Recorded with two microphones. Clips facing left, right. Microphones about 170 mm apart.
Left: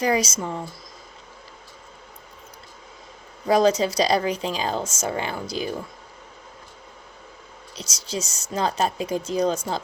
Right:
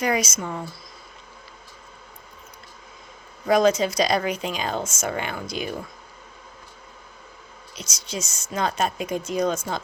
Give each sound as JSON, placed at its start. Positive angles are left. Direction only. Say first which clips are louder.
{"t": 0.0, "sound": "speech", "louder": "left 2 dB", "side_deg": 35}
{"t": 3.4, "sound": "speech", "louder": "even", "side_deg": 35}
{"t": 7.8, "sound": "speech", "louder": "left 2 dB", "side_deg": 35}